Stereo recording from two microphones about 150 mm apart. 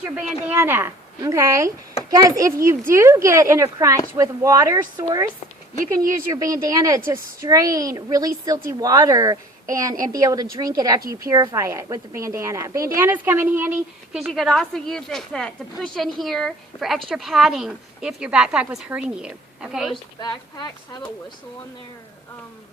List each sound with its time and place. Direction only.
0.2 s a woman's voice: 10° right (ahead or behind); by 5.2 s 30° right (ahead or behind)
6.3 s a woman's voice: 25° right (ahead or behind)
14.2 s a woman's voice: centre (ahead or behind)
19.9 s speech: 30° left (ahead or behind)